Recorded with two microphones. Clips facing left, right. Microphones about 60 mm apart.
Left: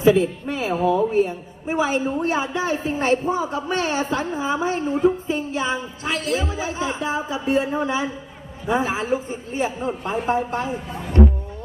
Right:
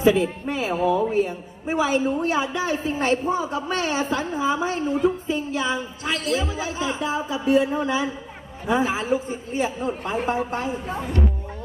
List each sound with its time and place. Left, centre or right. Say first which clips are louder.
0.2 s speech: left 1 dB; right
0.7 s a woman's voice: left 2 dB; left
11.2 s speech: left 10 dB; left